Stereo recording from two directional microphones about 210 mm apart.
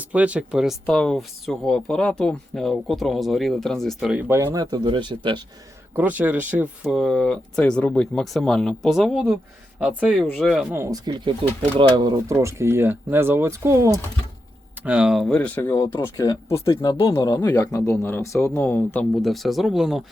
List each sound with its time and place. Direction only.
0.0 s speech: 5° right (ahead or behind)
4.5 s speech: 20° right (ahead or behind)
5.9 s speech: 5° right (ahead or behind)
10.7 s speech: 15° right (ahead or behind)